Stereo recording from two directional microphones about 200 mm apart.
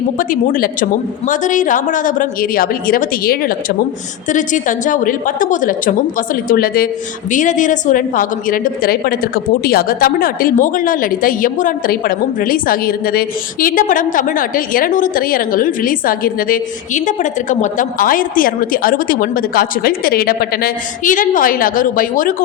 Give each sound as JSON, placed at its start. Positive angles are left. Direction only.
{"t": 0.2, "sound": "a woman's voice", "side_deg": 45}